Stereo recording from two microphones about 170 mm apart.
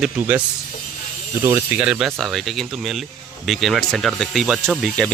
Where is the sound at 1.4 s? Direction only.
15° right (ahead or behind).